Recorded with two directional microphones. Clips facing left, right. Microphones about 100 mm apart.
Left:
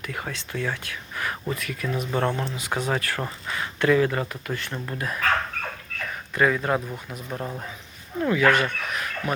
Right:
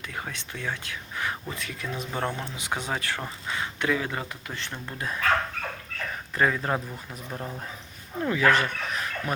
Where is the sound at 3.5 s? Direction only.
15° right (ahead or behind).